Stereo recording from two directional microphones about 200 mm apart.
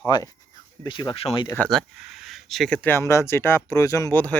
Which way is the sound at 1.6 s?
Centre (ahead or behind).